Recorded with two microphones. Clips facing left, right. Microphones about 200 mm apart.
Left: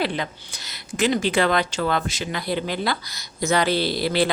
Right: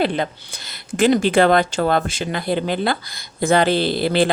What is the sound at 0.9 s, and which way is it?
Speech, 55° right (ahead or behind).